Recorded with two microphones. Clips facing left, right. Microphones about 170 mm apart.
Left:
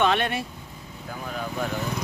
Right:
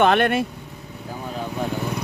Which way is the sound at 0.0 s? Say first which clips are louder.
Right 6 dB; 55° right (ahead or behind).